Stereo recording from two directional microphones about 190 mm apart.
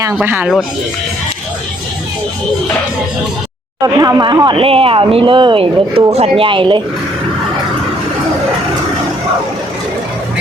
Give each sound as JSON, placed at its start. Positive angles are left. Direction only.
{"t": 0.1, "sound": "speech", "side_deg": -5}
{"t": 3.9, "sound": "speech", "side_deg": -20}